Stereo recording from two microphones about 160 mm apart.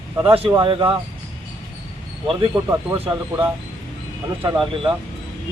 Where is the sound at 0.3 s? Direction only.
35° right (ahead or behind).